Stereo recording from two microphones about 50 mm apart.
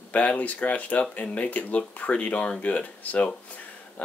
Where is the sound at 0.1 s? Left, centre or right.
Left.